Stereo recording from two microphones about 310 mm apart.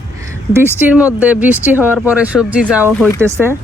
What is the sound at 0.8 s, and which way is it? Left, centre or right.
Speech, centre.